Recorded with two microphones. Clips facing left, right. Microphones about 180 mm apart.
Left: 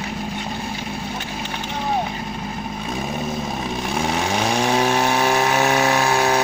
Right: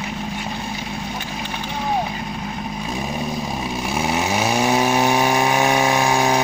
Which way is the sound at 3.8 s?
5° right (ahead or behind).